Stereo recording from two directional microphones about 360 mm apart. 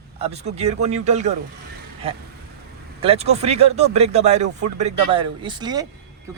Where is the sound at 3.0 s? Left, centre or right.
Centre.